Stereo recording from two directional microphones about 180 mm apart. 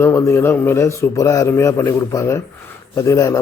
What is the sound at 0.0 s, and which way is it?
A man's voice, 15° left (ahead or behind).